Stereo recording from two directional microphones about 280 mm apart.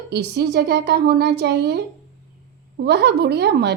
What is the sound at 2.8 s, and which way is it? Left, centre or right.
Speech, right.